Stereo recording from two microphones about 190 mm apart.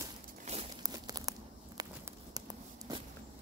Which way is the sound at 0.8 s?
20° right (ahead or behind).